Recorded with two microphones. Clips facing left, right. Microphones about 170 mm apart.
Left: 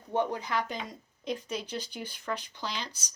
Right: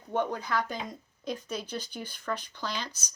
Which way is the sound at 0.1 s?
20° left (ahead or behind).